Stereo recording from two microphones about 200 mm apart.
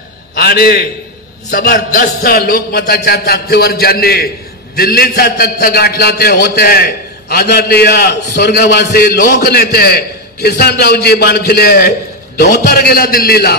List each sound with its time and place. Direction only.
0.4 s a man's voice: 50° left (ahead or behind)